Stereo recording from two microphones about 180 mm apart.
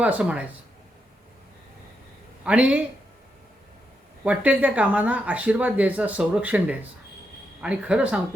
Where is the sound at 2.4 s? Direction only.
5° right (ahead or behind).